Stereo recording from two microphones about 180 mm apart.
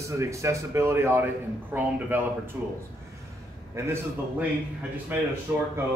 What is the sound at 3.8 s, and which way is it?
Speech, 15° right (ahead or behind).